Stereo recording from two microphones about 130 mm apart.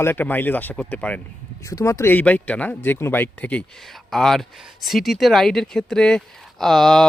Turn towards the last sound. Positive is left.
turn(degrees=5)  # may be behind; listen again after turning